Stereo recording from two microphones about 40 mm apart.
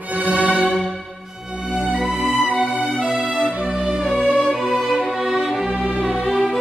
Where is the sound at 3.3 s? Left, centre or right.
Right.